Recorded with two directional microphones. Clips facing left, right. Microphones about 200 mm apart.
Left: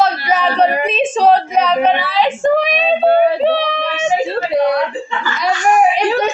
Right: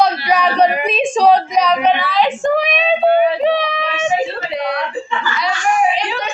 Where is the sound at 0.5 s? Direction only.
5° left (ahead or behind).